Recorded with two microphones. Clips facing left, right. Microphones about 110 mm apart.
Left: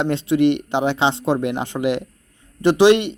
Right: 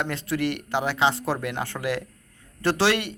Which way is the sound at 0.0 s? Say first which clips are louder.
Left 9 dB; 25° left (ahead or behind).